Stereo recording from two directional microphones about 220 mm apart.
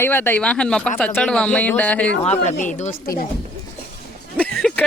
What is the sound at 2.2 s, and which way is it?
Speech, 30° left (ahead or behind).